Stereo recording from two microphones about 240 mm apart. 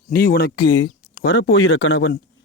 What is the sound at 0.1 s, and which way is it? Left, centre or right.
Speech, left.